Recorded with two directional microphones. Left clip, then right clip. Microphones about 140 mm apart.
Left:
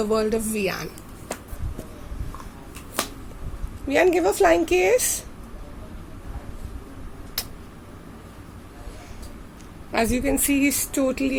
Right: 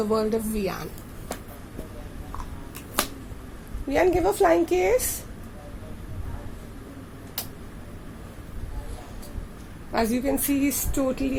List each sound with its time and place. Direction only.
0.0 s speech: 65° left (ahead or behind)
3.8 s a woman's voice: 75° left (ahead or behind)
7.4 s a sound: 85° left
9.9 s speech: 70° left (ahead or behind); by 11.3 s 90° left